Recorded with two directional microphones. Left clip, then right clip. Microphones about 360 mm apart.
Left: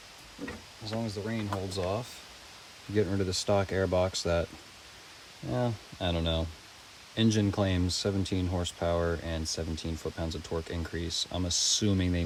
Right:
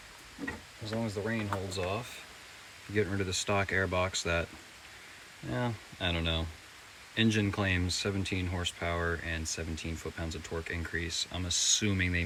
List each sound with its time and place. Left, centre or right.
0.9 s speech: centre
5.5 s speech: centre